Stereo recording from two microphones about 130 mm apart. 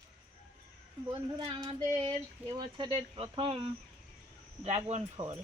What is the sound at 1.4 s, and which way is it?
Speech, 35° right (ahead or behind).